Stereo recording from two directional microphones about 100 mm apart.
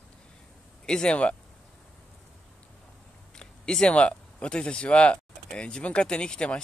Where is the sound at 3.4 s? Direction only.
5° left (ahead or behind).